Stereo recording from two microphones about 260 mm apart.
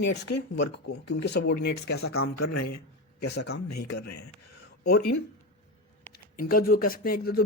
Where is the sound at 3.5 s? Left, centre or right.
Left.